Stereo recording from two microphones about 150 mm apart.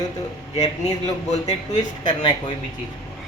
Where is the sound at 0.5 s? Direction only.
25° left (ahead or behind).